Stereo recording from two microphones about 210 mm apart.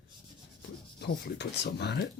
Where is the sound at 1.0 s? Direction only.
55° left (ahead or behind).